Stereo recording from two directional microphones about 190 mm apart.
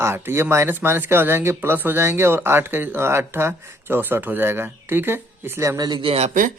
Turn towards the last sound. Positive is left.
turn(degrees=-40)  # may be behind; listen again after turning